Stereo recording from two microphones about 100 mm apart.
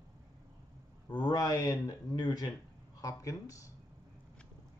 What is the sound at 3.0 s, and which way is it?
Speech, 35° left (ahead or behind).